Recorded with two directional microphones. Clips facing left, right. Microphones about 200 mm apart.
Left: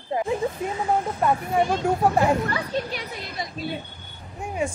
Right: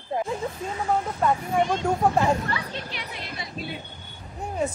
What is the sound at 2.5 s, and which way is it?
Speech, 45° left (ahead or behind).